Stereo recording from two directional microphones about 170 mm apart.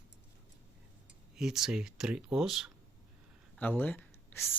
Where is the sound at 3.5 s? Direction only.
10° left (ahead or behind).